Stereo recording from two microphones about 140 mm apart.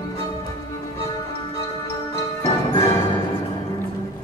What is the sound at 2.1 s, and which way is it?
Music, 20° left (ahead or behind).